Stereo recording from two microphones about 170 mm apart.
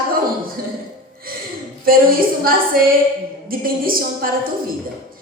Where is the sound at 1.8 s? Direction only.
60° right (ahead or behind).